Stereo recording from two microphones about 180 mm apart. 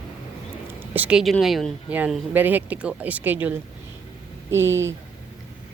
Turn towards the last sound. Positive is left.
turn(degrees=-15)  # may be behind; listen again after turning